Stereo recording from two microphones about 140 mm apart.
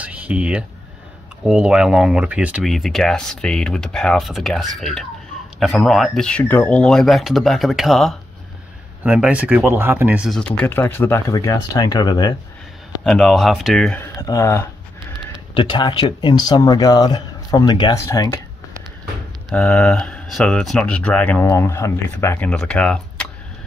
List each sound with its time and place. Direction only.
0.0 s a sound: 10° right (ahead or behind)
1.4 s speech: 5° right (ahead or behind)
10.3 s speech: 10° left (ahead or behind); by 12.4 s 30° left (ahead or behind)
13.0 s speech: 5° left (ahead or behind)
13.9 s speech: 20° left (ahead or behind)
15.5 s speech: 35° left (ahead or behind)
19.5 s speech: 5° left (ahead or behind)
22.5 s speech: 5° left (ahead or behind)